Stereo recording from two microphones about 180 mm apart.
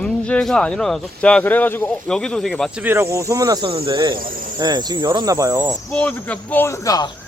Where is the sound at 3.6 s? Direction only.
30° right (ahead or behind); by 5.7 s 15° right (ahead or behind).